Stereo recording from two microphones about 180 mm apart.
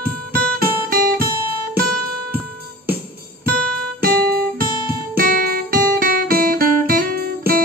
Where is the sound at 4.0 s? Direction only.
55° right (ahead or behind).